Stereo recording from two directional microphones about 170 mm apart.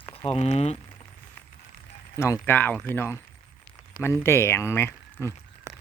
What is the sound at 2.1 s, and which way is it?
Speech, 15° left (ahead or behind).